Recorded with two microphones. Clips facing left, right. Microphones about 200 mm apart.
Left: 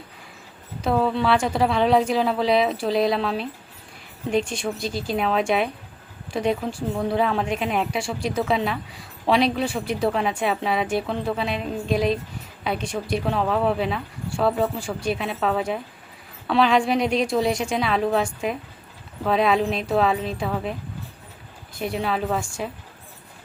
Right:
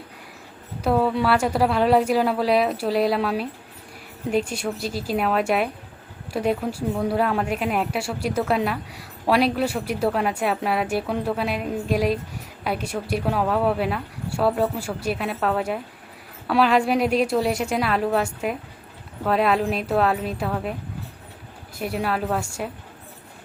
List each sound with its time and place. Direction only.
0.8 s speech: 5° right (ahead or behind)
21.8 s speech: 5° right (ahead or behind)